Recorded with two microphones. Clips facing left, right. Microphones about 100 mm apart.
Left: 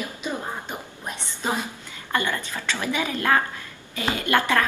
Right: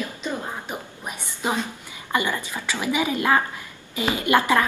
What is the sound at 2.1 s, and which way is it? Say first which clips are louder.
A woman's voice: right 1 dB; 15° right (ahead or behind).